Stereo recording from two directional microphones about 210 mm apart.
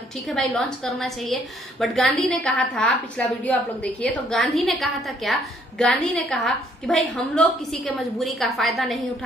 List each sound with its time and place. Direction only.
0.3 s a woman's voice: centre (ahead or behind)